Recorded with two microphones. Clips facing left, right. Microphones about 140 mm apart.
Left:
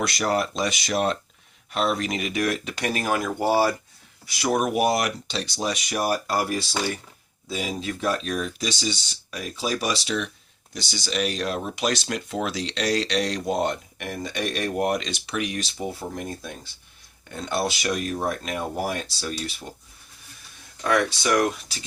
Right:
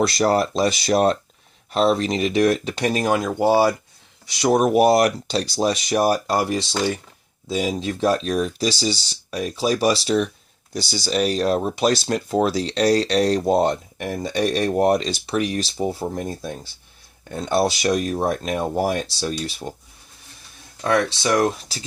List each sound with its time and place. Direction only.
0.0 s speech: 30° right (ahead or behind); by 3.8 s 15° right (ahead or behind)
4.4 s speech: 30° right (ahead or behind)
20.8 s speech: 25° right (ahead or behind)